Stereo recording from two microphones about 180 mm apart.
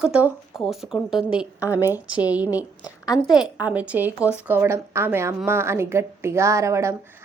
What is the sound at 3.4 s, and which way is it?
Speech, 5° right (ahead or behind).